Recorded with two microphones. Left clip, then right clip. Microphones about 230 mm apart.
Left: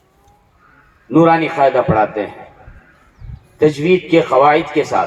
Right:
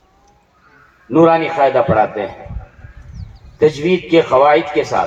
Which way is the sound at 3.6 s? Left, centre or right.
Left.